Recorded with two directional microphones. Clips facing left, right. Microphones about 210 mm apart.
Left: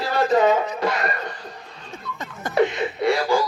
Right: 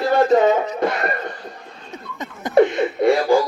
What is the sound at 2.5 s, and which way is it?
Speech, 50° right (ahead or behind).